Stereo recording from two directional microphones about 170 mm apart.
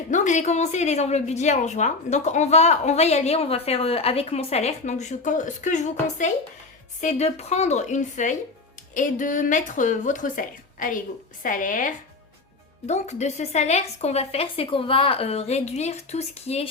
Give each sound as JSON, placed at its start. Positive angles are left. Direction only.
{"t": 0.1, "sound": "a woman's voice", "side_deg": 45}